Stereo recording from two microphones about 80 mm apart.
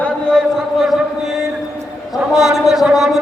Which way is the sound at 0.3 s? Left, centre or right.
Centre.